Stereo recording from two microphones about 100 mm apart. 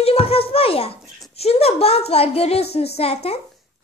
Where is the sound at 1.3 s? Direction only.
90° left.